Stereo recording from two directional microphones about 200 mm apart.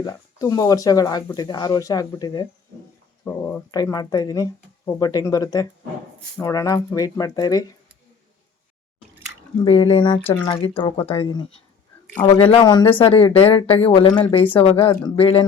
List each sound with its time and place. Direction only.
0.0 s speech: 20° left (ahead or behind)
3.2 s speech: 10° left (ahead or behind)
9.6 s speech: 25° left (ahead or behind)